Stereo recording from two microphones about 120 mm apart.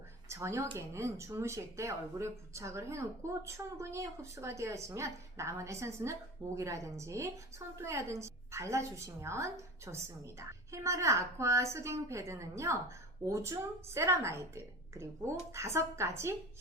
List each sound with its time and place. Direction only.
0.3 s speech: 25° right (ahead or behind)